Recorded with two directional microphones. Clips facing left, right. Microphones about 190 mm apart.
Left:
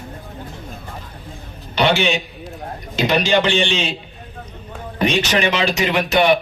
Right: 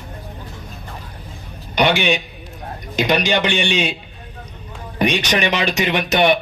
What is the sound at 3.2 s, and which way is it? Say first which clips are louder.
Speech: left 2 dB; 15° right (ahead or behind).